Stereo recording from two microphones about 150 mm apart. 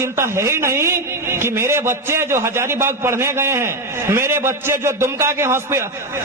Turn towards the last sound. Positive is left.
turn(degrees=-15)  # may be behind; listen again after turning